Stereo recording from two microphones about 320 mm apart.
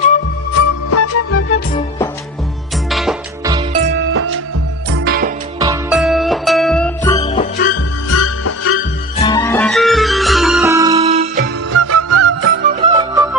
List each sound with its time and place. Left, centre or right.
0.9 s music: left
2.9 s music: centre
3.5 s music: centre
4.0 s music: right
5.5 s music: centre
5.9 s music: centre
7.3 s music: left
8.1 s music: left
9.2 s music: centre; by 11.4 s right
11.7 s music: right
12.8 s music: centre